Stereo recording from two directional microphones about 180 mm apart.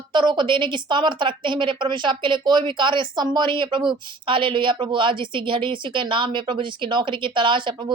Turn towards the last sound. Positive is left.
turn(degrees=-25)  # may be behind; listen again after turning